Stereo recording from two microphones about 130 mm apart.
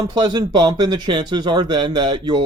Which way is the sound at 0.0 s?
35° right (ahead or behind).